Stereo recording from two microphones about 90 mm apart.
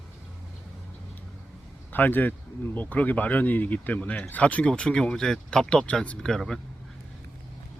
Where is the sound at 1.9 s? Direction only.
20° left (ahead or behind); by 6.6 s 5° left (ahead or behind).